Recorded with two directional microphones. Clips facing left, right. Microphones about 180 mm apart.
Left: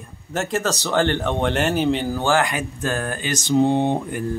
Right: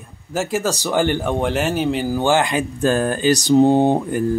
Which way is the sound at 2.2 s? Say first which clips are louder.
Right 3 dB; 20° right (ahead or behind).